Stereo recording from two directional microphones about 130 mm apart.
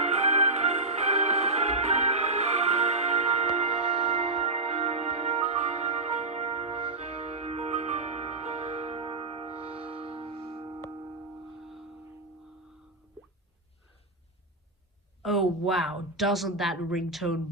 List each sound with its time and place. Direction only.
0.0 s music: 60° right (ahead or behind)
3.9 s music: 50° right (ahead or behind)
10.3 s music: 35° right (ahead or behind)
11.6 s music: centre (ahead or behind)
15.2 s speech: centre (ahead or behind)